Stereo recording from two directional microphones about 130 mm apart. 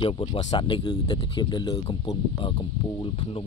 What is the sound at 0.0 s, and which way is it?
Speech, 40° left (ahead or behind).